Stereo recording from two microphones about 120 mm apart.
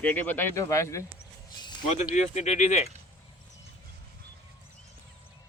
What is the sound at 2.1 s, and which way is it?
Speech, 75° left (ahead or behind).